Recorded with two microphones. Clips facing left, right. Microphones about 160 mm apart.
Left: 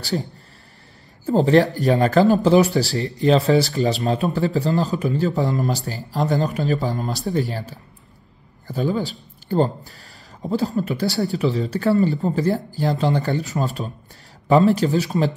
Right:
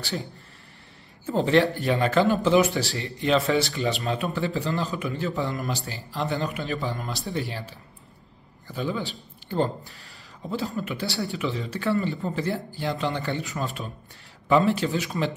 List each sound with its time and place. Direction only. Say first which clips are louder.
0.0 s speech: left 7 dB; 40° left (ahead or behind)